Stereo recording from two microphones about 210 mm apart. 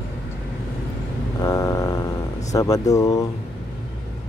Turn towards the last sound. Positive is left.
turn(degrees=15)  # may be behind; listen again after turning